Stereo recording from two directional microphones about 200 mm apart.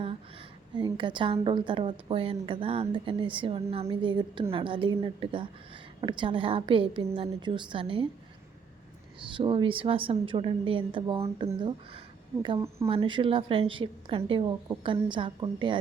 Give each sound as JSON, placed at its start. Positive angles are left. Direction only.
{"t": 0.8, "sound": "a woman's voice", "side_deg": -20}
{"t": 9.3, "sound": "a woman's voice", "side_deg": -25}